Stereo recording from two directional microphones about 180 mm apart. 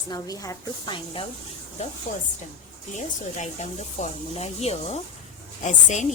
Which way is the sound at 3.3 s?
40° left (ahead or behind).